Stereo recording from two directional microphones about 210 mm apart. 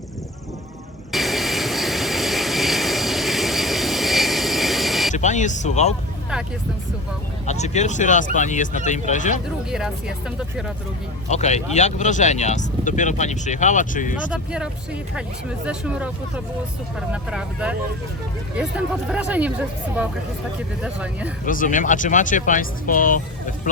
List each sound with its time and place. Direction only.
1.1 s vehicle: centre (ahead or behind)
5.1 s speech: 35° left (ahead or behind)
7.4 s speech: 35° left (ahead or behind)
9.6 s speech: 5° right (ahead or behind)
11.3 s speech: 35° left (ahead or behind)
14.3 s speech: 5° right (ahead or behind)
17.1 s speech: 5° right (ahead or behind)
19.0 s speech: 5° right (ahead or behind)
21.4 s speech: 40° left (ahead or behind)